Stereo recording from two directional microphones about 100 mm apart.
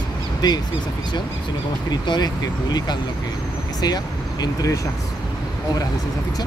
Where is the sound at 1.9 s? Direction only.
45° left (ahead or behind).